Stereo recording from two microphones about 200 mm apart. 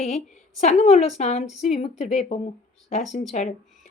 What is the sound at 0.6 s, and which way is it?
A woman's voice, 35° left (ahead or behind).